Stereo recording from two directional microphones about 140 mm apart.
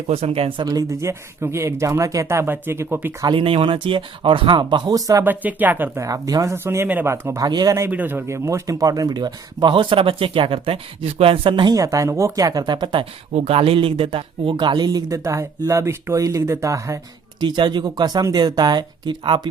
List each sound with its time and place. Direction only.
0.1 s speech: 45° right (ahead or behind); by 3.2 s 15° right (ahead or behind)
3.2 s speech: 40° right (ahead or behind)
5.2 s speech: 10° right (ahead or behind)
7.9 s speech: 10° right (ahead or behind); by 19.4 s 35° right (ahead or behind)